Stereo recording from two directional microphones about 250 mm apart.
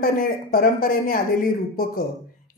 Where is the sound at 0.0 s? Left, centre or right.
Left.